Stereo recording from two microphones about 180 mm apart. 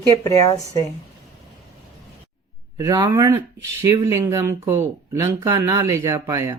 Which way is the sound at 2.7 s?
20° right (ahead or behind).